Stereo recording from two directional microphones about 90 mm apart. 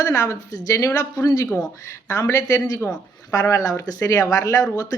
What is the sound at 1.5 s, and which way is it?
Speech, 10° left (ahead or behind).